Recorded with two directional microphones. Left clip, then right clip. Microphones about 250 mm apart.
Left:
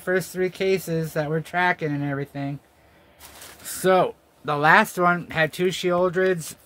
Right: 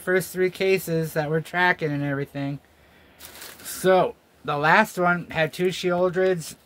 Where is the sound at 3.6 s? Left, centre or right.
Centre.